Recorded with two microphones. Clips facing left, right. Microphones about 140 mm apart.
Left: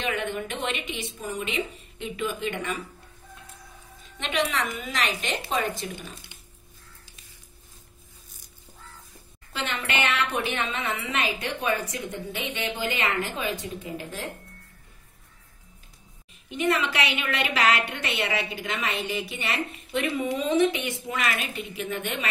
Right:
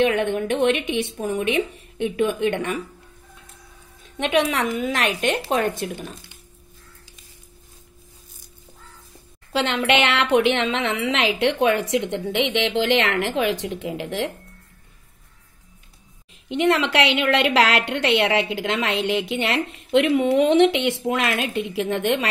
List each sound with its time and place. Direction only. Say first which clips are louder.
0.0 s a woman's voice: right 9 dB; 60° right (ahead or behind)
5.3 s a woman's voice: right 6 dB; 65° right (ahead or behind)
9.5 s a woman's voice: right 10 dB; 90° right
16.4 s a woman's voice: right 6 dB; 90° right